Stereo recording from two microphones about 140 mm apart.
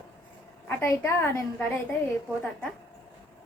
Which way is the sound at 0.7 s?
20° left (ahead or behind).